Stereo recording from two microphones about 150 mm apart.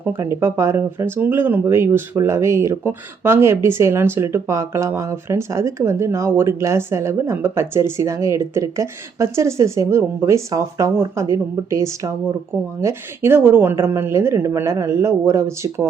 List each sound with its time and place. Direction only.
0.0 s speech: 15° right (ahead or behind)